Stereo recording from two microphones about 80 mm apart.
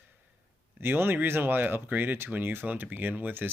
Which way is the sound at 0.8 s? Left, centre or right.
Right.